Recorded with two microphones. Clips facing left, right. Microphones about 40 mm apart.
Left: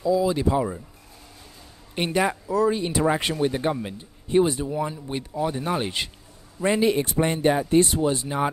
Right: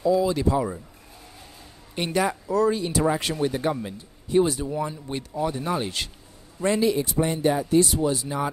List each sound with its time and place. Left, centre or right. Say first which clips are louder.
0.3 s speech: even; centre
2.0 s speech: left 1 dB; centre
2.4 s speech: even; centre
2.8 s speech: left 1 dB; left
4.6 s speech: left 1 dB; centre; by 6.9 s left
6.9 s speech: left 1 dB; left